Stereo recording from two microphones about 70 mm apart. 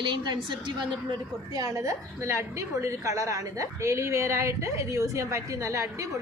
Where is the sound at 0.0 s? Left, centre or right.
Right.